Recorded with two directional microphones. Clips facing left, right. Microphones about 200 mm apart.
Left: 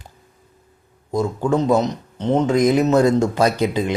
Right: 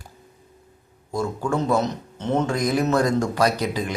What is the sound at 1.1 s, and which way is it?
A man's voice, 20° left (ahead or behind).